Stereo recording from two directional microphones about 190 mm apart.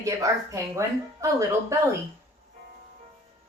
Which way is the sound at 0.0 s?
15° right (ahead or behind).